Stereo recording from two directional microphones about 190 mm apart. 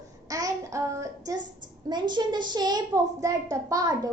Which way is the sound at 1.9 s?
25° right (ahead or behind).